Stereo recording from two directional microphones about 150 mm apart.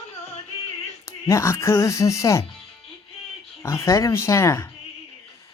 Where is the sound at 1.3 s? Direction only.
20° left (ahead or behind).